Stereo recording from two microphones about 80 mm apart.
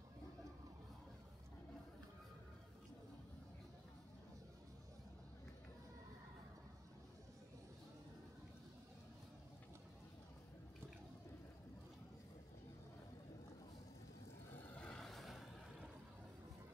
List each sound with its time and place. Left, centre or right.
14.6 s vehicle: centre
15.0 s vehicle: centre